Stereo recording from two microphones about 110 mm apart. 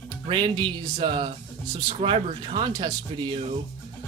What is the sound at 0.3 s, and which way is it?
Speech, 50° right (ahead or behind).